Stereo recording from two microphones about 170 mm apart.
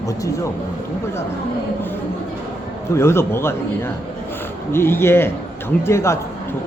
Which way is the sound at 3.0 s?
15° left (ahead or behind).